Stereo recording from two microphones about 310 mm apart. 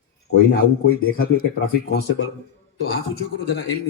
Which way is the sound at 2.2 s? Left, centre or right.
Left.